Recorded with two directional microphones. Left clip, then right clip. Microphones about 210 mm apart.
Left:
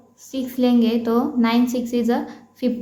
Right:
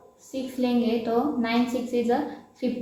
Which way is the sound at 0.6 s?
50° left (ahead or behind).